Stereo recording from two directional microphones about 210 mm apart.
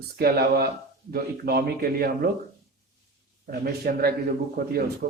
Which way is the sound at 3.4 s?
45° right (ahead or behind).